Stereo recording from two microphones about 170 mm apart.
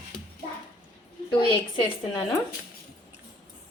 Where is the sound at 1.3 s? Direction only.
30° left (ahead or behind).